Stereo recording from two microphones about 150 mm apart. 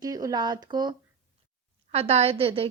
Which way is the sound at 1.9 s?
45° right (ahead or behind).